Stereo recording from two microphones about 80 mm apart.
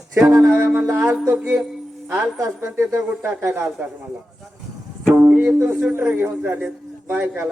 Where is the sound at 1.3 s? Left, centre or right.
Centre.